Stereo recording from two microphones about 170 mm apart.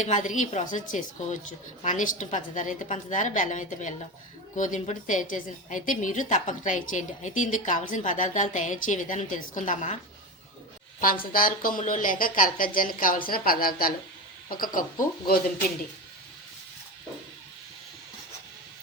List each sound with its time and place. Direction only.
0.0 s a woman's voice: 45° left (ahead or behind)
11.0 s speech: 55° left (ahead or behind)